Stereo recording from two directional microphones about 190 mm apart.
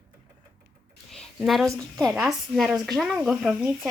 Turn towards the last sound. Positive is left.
turn(degrees=0)  # may be behind; listen again after turning